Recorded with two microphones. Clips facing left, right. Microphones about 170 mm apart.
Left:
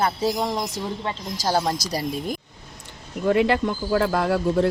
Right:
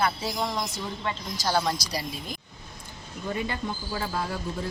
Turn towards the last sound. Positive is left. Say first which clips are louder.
# left 11 dB
turn(degrees=75)  # may be behind; listen again after turning